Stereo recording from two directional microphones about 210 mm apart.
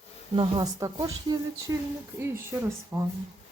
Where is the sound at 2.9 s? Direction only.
10° right (ahead or behind).